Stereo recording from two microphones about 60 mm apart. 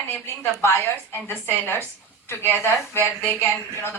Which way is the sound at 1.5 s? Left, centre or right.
Left.